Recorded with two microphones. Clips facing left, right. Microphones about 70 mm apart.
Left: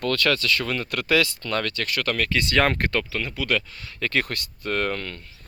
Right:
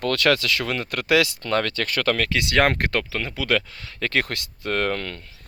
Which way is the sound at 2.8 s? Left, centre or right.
Right.